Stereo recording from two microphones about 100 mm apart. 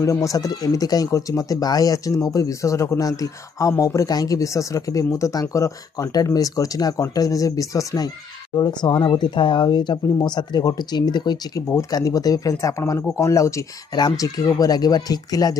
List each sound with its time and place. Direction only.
0.0 s speech: 35° left (ahead or behind)
8.5 s speech: 45° left (ahead or behind)